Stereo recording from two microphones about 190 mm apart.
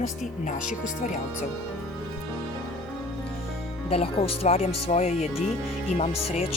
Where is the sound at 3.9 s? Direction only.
30° left (ahead or behind).